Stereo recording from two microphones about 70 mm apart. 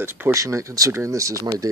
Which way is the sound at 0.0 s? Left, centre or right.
Right.